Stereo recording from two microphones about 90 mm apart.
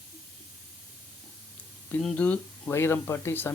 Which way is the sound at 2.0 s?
15° left (ahead or behind).